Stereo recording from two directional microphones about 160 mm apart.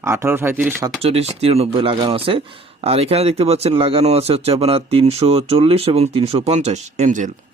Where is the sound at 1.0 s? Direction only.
40° right (ahead or behind).